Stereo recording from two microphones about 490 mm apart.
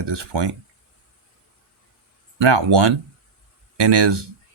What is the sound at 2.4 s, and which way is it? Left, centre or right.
Speech, right.